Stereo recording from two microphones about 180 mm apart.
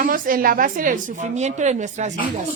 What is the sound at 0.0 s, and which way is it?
A woman's voice, 50° right (ahead or behind).